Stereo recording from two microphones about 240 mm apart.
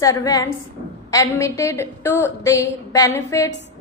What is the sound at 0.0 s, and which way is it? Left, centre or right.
Female singing, centre.